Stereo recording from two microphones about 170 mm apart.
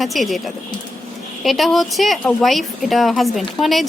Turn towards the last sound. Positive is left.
turn(degrees=0)  # may be behind; listen again after turning